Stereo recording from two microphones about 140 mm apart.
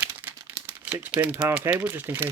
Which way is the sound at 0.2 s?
15° right (ahead or behind).